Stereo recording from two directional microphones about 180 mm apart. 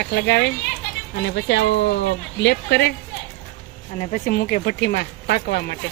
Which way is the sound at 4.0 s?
40° left (ahead or behind).